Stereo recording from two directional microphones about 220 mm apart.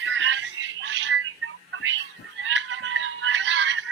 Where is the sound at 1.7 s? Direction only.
60° right (ahead or behind).